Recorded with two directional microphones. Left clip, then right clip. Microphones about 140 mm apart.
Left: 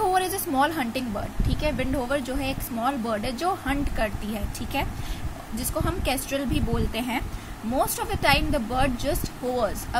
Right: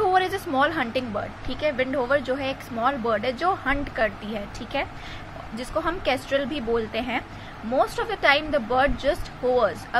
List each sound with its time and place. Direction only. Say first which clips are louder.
0.0 s speech: right 2 dB; 15° left (ahead or behind)